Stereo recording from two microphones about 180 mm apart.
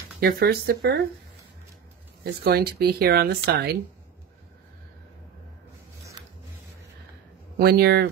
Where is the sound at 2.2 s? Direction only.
60° right (ahead or behind).